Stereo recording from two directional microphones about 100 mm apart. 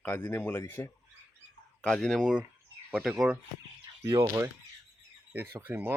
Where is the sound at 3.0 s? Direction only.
5° right (ahead or behind).